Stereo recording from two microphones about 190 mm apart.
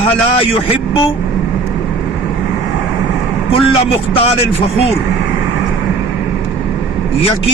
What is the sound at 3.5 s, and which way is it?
Speech, 30° left (ahead or behind).